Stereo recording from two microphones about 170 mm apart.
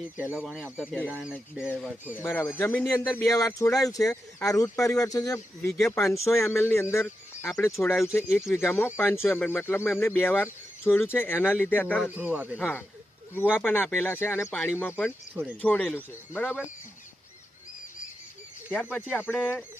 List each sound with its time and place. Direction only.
0.2 s speech: 5° right (ahead or behind)
1.0 s speech: 10° right (ahead or behind)
2.1 s speech: 15° left (ahead or behind)
8.3 s speech: 5° right (ahead or behind)
8.5 s speech: 15° left (ahead or behind)
12.0 s speech: 10° right (ahead or behind)
12.5 s speech: 10° left (ahead or behind)
18.7 s speech: 10° left (ahead or behind)